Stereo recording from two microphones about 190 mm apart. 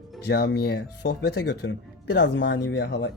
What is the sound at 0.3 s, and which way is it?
Speech, 60° left (ahead or behind).